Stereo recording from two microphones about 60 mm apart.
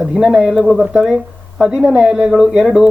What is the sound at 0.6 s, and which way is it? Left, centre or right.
Speech, centre.